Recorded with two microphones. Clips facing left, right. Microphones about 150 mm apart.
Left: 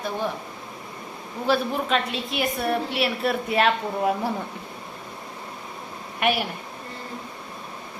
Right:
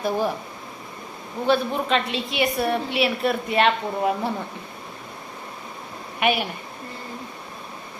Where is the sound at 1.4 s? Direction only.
5° left (ahead or behind).